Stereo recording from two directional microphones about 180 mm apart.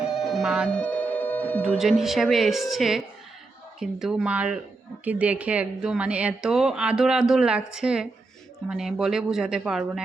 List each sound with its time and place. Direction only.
0.0 s music: centre (ahead or behind)
1.8 s a woman's voice: centre (ahead or behind)